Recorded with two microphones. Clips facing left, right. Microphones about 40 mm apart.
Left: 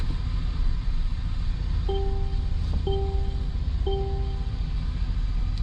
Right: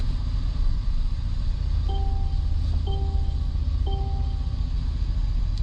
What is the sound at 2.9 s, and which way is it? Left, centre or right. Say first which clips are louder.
Music: left 10 dB; left.